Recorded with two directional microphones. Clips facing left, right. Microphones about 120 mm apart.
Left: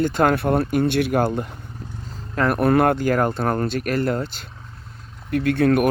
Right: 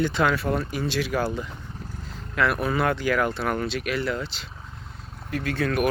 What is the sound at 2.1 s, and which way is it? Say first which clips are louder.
Vehicle: left 3 dB; 35° left (ahead or behind).